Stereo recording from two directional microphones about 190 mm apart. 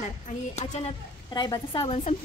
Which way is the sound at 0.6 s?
35° left (ahead or behind).